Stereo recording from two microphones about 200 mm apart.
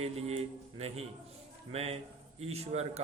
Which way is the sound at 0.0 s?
30° right (ahead or behind).